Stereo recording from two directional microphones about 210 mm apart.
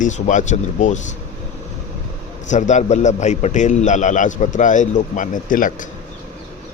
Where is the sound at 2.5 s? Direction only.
35° left (ahead or behind).